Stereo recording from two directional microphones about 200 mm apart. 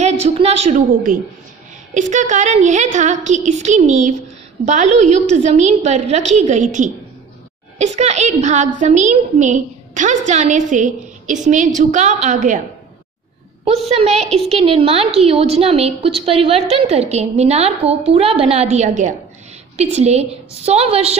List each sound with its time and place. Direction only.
0.0 s a woman's voice: 30° right (ahead or behind)
13.8 s a woman's voice: 30° right (ahead or behind)